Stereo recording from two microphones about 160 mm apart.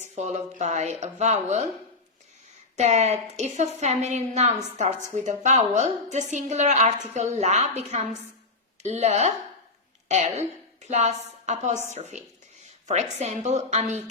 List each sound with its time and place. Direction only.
0.0 s a woman's voice: 45° right (ahead or behind)
2.7 s a woman's voice: 45° right (ahead or behind)